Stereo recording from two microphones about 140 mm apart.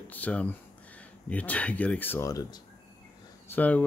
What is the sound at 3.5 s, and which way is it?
Speech, 10° left (ahead or behind).